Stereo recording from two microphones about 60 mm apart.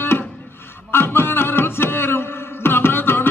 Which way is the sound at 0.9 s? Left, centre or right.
Left.